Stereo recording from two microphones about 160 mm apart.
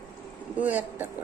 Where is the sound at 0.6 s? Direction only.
10° right (ahead or behind).